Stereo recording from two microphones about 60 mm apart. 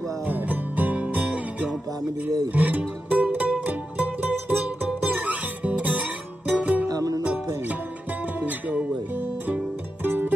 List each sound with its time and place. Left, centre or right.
0.3 s music: right
6.9 s music: right
8.4 s music: right